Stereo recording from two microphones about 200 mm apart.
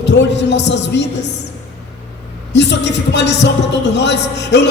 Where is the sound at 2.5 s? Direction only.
60° left (ahead or behind).